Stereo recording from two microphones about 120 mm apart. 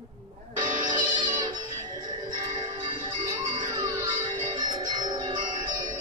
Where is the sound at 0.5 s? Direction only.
40° right (ahead or behind).